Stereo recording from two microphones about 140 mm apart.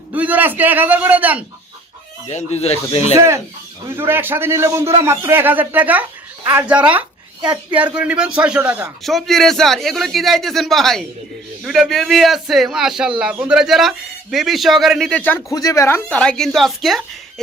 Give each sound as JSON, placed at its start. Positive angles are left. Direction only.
{"t": 0.1, "sound": "a man's voice", "side_deg": -10}
{"t": 2.2, "sound": "speech", "side_deg": 50}
{"t": 3.2, "sound": "a man's voice", "side_deg": -20}
{"t": 9.0, "sound": "a man's voice", "side_deg": 0}
{"t": 15.5, "sound": "speech", "side_deg": 25}
{"t": 16.0, "sound": "a man's voice", "side_deg": 10}